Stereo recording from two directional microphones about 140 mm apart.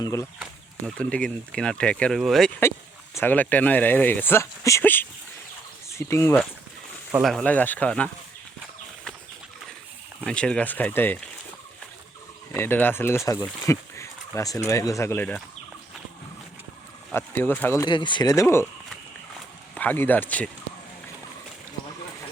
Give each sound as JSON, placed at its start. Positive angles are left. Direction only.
{"t": 0.0, "sound": "speech", "side_deg": 20}
{"t": 0.9, "sound": "speech", "side_deg": 5}
{"t": 3.2, "sound": "speech", "side_deg": 15}
{"t": 7.1, "sound": "speech", "side_deg": 0}
{"t": 7.5, "sound": "speech", "side_deg": 10}
{"t": 10.2, "sound": "speech", "side_deg": 5}
{"t": 12.5, "sound": "speech", "side_deg": 15}
{"t": 17.1, "sound": "speech", "side_deg": 15}
{"t": 17.8, "sound": "speech", "side_deg": 35}
{"t": 19.7, "sound": "speech", "side_deg": 10}